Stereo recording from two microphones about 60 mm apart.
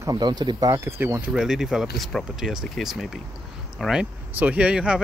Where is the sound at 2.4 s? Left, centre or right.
Centre.